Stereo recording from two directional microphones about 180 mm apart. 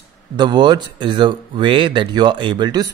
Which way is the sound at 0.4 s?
25° right (ahead or behind).